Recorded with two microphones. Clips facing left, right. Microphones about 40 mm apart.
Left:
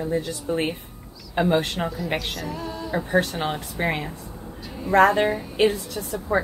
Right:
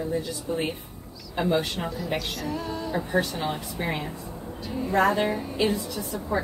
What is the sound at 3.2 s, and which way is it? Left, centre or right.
Speech, left.